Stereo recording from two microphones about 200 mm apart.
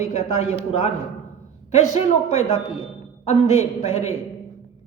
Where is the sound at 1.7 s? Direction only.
35° left (ahead or behind).